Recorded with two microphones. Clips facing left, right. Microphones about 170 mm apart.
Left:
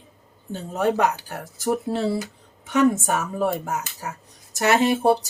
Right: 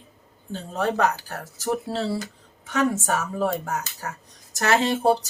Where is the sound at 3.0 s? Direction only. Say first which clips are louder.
Left 1 dB; 15° left (ahead or behind).